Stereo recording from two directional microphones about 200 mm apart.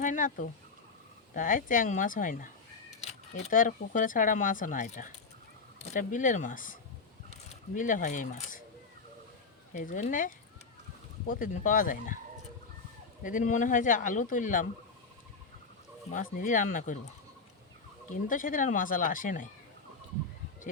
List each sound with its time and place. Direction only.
0.0 s speech: 40° left (ahead or behind)
7.8 s speech: 40° left (ahead or behind)
9.7 s speech: 40° left (ahead or behind)
13.2 s speech: 40° left (ahead or behind)
16.1 s speech: 40° left (ahead or behind)
18.1 s speech: 40° left (ahead or behind)